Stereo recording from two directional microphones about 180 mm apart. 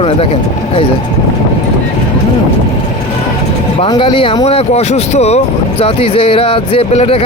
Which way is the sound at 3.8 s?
30° left (ahead or behind).